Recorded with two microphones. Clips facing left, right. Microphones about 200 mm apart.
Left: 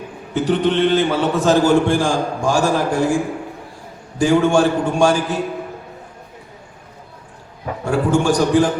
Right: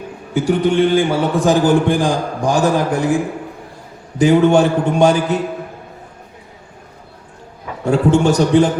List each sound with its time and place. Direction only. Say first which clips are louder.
0.3 s a man's voice: right 2 dB; 10° right (ahead or behind)
4.2 s a man's voice: right 3 dB; 20° right (ahead or behind)
7.9 s a man's voice: right 3 dB; 25° right (ahead or behind)